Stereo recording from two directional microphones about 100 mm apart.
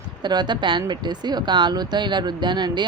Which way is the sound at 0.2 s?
45° right (ahead or behind).